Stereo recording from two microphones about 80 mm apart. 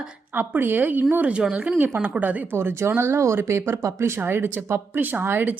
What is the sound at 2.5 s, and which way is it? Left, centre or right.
A woman's voice, right.